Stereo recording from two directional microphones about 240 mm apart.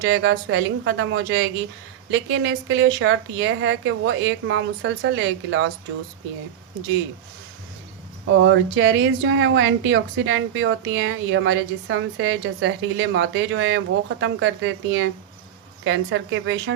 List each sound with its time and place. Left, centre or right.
0.0 s speech: right
8.3 s speech: right